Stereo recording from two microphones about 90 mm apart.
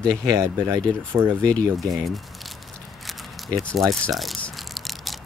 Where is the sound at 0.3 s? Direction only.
35° right (ahead or behind).